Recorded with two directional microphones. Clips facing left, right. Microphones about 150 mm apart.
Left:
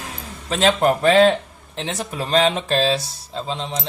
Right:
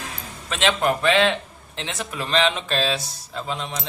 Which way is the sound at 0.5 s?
35° left (ahead or behind).